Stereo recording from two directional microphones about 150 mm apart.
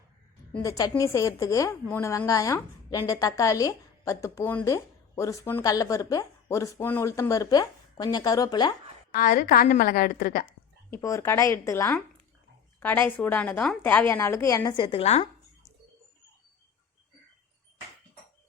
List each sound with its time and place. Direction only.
0.6 s a woman's voice: 20° left (ahead or behind)
9.1 s a woman's voice: 60° left (ahead or behind)
10.9 s a woman's voice: 15° left (ahead or behind)
14.8 s speech: 40° left (ahead or behind)